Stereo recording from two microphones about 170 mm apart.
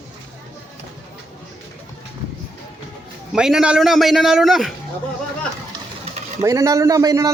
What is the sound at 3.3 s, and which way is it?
A man's voice, 5° right (ahead or behind).